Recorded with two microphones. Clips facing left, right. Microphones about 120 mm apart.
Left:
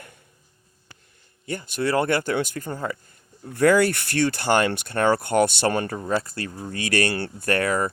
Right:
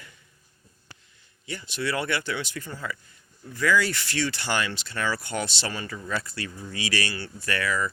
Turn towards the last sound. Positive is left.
turn(degrees=50)  # may be behind; listen again after turning